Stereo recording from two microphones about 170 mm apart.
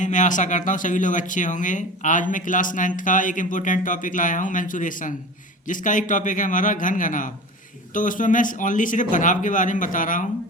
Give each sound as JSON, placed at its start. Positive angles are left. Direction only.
{"t": 0.0, "sound": "speech", "side_deg": 45}